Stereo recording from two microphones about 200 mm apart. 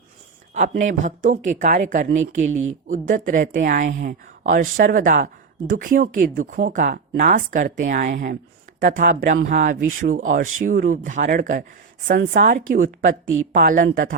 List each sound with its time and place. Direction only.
0.5 s speech: 40° right (ahead or behind)
2.5 s speech: 85° right
2.8 s speech: 40° right (ahead or behind)